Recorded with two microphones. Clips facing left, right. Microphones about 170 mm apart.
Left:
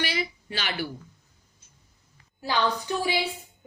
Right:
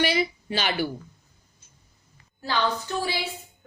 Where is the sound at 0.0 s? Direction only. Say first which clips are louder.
Right 6 dB; 20° right (ahead or behind).